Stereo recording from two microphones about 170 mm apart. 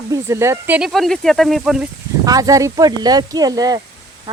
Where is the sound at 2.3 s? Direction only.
20° right (ahead or behind).